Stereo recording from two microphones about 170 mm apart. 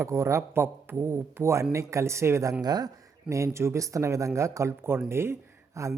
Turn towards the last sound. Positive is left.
turn(degrees=-15)  # may be behind; listen again after turning